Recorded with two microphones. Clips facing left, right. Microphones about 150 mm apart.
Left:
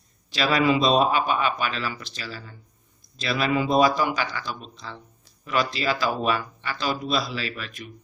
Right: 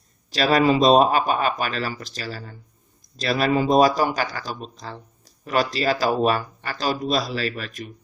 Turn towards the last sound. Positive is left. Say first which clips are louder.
# right 5 dB
turn(degrees=-40)  # may be behind; listen again after turning